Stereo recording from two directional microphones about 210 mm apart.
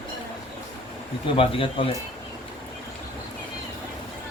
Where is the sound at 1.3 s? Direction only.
25° left (ahead or behind).